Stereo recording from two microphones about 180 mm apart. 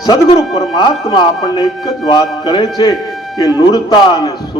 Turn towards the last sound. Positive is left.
turn(degrees=25)  # may be behind; listen again after turning